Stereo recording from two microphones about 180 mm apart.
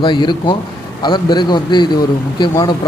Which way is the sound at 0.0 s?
25° left (ahead or behind).